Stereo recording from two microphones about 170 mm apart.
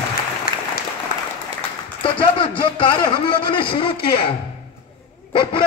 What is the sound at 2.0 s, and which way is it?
Speech, 30° left (ahead or behind).